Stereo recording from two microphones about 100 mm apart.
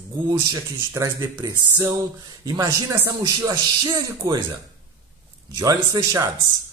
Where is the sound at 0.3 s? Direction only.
35° right (ahead or behind).